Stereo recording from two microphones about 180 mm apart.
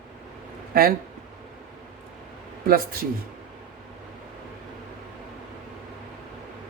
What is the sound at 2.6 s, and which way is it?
Speech, 55° right (ahead or behind).